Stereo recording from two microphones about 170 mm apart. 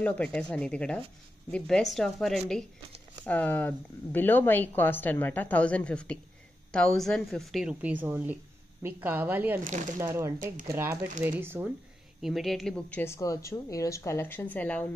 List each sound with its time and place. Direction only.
0.0 s a woman's voice: 5° left (ahead or behind); by 11.7 s 10° right (ahead or behind)
12.2 s speech: centre (ahead or behind)